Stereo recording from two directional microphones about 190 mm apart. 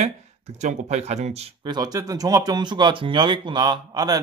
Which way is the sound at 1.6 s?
20° right (ahead or behind).